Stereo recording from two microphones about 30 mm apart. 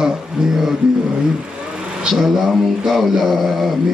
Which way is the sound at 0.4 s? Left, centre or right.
Right.